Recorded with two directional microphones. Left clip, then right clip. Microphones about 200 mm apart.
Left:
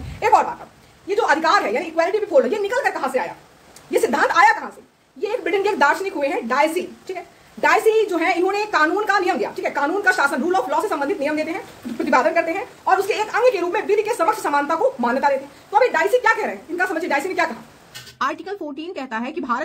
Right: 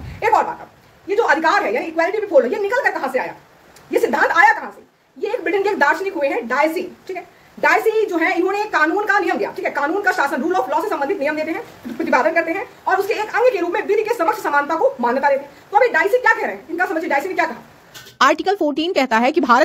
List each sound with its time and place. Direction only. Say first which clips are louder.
0.2 s dog: even; 10° left (ahead or behind)
1.0 s a woman's voice: right 2 dB; 10° left (ahead or behind)
3.9 s a sound: right 2 dB; 10° left (ahead or behind)
5.2 s a woman's voice: right 1 dB; 10° left (ahead or behind)
18.1 s speech: right 9 dB; 35° right (ahead or behind)